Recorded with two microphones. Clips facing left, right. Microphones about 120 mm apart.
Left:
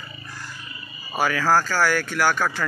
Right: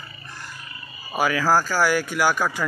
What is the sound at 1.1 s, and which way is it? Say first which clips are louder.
Speech: even; 10° right (ahead or behind).